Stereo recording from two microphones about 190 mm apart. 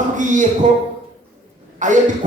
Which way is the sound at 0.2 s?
40° right (ahead or behind).